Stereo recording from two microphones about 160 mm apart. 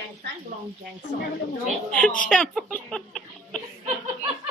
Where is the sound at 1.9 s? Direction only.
5° left (ahead or behind).